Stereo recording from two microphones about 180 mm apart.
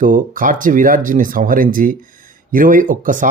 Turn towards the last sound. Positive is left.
turn(degrees=-45)  # may be behind; listen again after turning